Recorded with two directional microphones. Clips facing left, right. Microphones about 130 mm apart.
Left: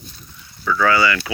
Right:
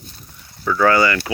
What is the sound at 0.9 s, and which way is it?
Speech, 45° right (ahead or behind).